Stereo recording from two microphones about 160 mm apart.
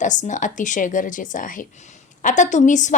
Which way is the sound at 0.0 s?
50° left (ahead or behind).